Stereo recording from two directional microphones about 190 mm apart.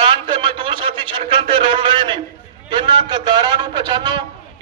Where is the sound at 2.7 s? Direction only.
25° right (ahead or behind).